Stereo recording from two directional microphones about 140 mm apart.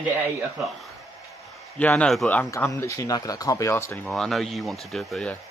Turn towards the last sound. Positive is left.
turn(degrees=5)  # may be behind; listen again after turning